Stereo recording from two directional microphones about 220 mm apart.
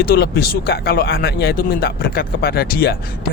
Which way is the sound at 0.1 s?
45° left (ahead or behind).